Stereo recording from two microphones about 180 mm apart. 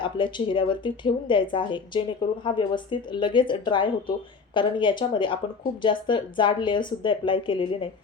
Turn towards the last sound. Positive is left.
turn(degrees=30)  # may be behind; listen again after turning